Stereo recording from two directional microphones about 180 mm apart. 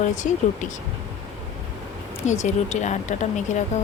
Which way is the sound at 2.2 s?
40° left (ahead or behind).